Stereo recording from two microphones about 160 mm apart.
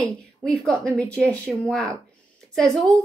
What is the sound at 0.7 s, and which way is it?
A woman's voice, 5° left (ahead or behind).